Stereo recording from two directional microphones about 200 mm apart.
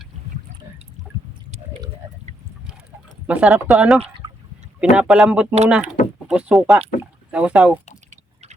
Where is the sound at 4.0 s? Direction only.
25° right (ahead or behind).